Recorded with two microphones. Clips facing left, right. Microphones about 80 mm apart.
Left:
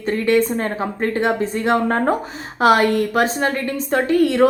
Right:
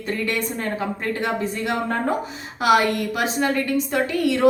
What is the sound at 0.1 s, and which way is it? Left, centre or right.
A woman's voice, left.